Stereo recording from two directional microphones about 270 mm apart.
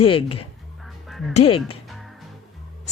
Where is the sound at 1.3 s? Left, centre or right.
Left.